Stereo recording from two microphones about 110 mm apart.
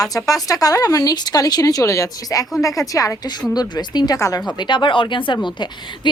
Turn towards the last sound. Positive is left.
turn(degrees=45)  # may be behind; listen again after turning